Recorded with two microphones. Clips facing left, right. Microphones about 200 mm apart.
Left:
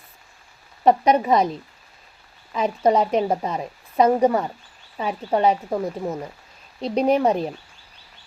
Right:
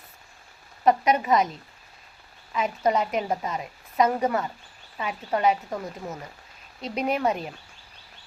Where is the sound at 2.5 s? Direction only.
35° left (ahead or behind).